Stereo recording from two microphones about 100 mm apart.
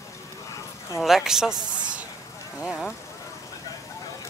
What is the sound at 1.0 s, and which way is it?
Speech, 5° right (ahead or behind).